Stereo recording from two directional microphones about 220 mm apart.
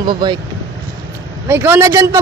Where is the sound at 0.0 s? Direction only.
20° right (ahead or behind).